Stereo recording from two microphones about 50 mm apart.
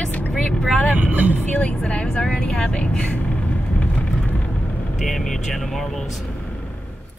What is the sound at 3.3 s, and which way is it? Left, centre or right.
Vehicle, left.